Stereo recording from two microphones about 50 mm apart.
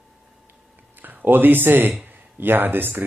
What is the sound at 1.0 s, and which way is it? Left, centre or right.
Speech, right.